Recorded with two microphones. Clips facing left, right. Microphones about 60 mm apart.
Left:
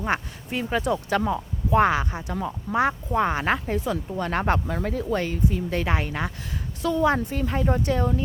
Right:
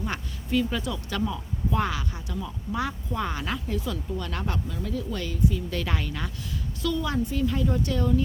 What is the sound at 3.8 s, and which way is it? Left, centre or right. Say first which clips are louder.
Speech: left 5 dB; left.